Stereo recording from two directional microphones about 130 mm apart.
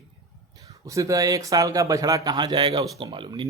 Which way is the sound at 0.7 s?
25° right (ahead or behind).